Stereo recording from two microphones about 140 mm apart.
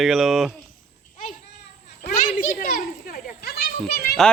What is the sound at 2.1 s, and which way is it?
Children playing, 75° left (ahead or behind).